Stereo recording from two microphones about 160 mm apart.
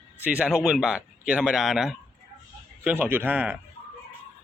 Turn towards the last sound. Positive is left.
turn(degrees=-10)  # may be behind; listen again after turning